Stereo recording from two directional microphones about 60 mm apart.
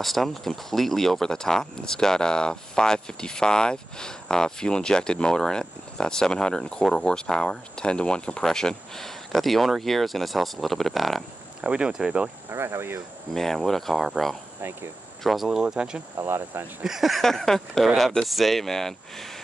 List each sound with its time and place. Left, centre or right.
0.0 s speech: centre
11.6 s speech: centre
12.4 s speech: right
13.3 s speech: centre
14.6 s speech: right
15.2 s speech: centre
16.2 s speech: right
16.8 s speech: centre